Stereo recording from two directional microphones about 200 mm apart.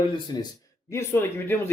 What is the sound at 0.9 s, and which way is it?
Speech, 10° left (ahead or behind).